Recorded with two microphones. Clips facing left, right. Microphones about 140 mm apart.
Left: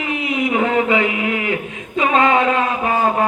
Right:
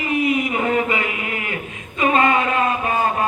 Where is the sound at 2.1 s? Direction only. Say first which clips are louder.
Left 3 dB; 90° left.